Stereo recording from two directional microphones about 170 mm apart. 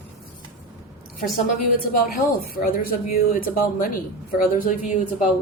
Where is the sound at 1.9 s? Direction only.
60° left (ahead or behind).